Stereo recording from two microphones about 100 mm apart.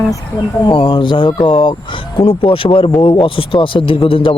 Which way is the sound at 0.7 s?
55° left (ahead or behind).